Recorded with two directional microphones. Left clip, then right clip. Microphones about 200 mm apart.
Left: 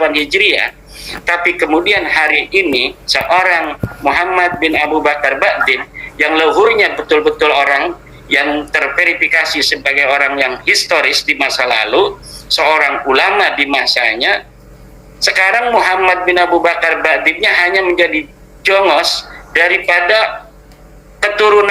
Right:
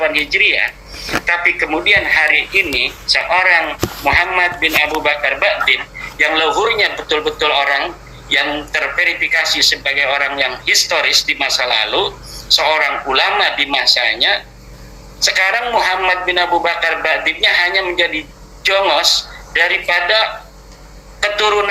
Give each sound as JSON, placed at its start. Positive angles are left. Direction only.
{"t": 0.0, "sound": "speech", "side_deg": 50}